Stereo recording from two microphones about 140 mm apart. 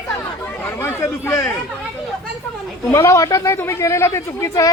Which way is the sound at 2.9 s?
20° left (ahead or behind).